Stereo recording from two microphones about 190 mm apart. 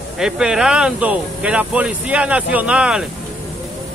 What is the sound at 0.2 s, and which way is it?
Speech, 5° right (ahead or behind).